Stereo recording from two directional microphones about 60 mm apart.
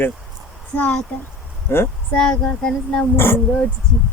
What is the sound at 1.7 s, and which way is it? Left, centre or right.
Speech, left.